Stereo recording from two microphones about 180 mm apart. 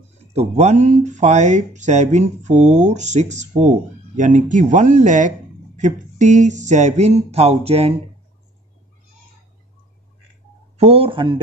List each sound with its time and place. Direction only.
0.3 s speech: 35° right (ahead or behind)
10.8 s speech: 30° right (ahead or behind)